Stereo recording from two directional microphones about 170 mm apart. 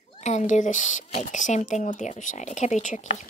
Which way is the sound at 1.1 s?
40° left (ahead or behind).